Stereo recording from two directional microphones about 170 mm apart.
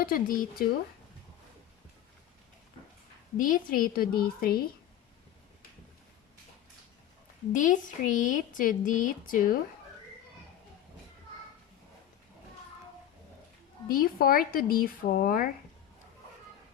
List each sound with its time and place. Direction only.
0.0 s speech: 55° left (ahead or behind)
3.3 s speech: 55° left (ahead or behind)
7.5 s speech: 50° left (ahead or behind)
13.8 s speech: 55° left (ahead or behind)